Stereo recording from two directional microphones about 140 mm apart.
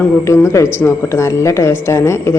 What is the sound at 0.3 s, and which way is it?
A woman's voice, 20° left (ahead or behind).